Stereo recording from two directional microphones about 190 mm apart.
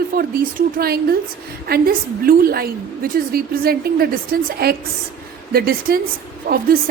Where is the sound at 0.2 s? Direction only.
55° right (ahead or behind).